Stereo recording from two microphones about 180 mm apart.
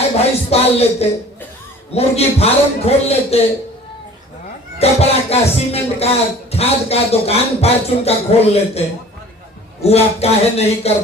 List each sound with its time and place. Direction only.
0.5 s speech: 35° left (ahead or behind)
4.8 s speech: 35° left (ahead or behind)
9.8 s speech: 35° left (ahead or behind)